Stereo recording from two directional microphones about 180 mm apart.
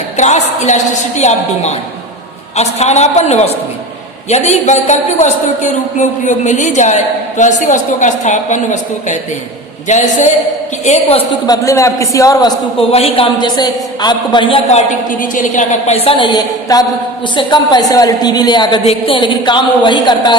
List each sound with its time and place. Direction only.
0.2 s a man's voice: 40° left (ahead or behind)
11.4 s a man's voice: 20° left (ahead or behind)
12.9 s a man's voice: 35° left (ahead or behind)